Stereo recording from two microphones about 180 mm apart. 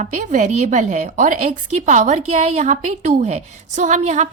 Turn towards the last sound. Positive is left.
turn(degrees=-40)  # may be behind; listen again after turning